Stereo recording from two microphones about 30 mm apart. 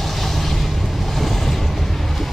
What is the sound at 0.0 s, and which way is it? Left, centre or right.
Vehicle, centre.